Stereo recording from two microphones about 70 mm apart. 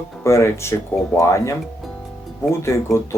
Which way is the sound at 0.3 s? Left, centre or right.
Left.